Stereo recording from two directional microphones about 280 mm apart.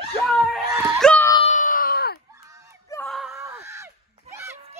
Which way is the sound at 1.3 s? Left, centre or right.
Left.